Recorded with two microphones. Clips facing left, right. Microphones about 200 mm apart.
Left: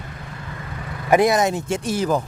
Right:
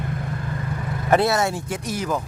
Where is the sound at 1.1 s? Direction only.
15° left (ahead or behind); by 2.2 s 30° left (ahead or behind).